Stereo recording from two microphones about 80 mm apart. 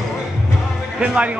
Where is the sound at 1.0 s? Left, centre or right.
Centre.